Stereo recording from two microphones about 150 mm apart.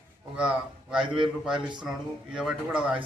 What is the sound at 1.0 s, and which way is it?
Speech, 35° right (ahead or behind).